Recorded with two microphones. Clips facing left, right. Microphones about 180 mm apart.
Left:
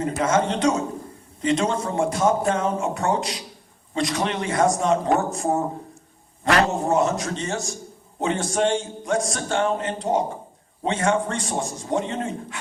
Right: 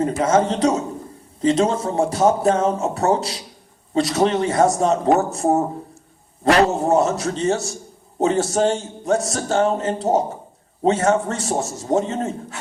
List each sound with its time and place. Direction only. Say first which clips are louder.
0.0 s a man's voice: right 4 dB; 30° right (ahead or behind)